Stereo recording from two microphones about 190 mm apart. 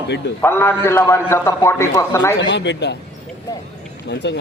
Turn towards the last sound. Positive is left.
turn(degrees=65)  # may be behind; listen again after turning